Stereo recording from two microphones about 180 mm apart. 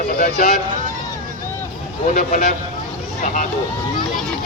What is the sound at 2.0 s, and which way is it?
Speech, 45° left (ahead or behind).